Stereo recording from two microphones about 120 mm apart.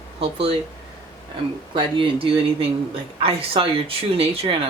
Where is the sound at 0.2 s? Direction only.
55° right (ahead or behind).